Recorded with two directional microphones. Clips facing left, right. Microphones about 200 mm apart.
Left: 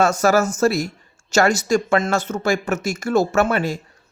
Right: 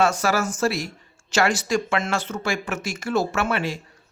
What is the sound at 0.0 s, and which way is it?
Speech, 45° left (ahead or behind).